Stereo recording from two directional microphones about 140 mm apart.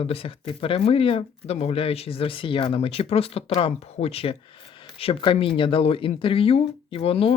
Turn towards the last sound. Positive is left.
turn(degrees=45)  # may be behind; listen again after turning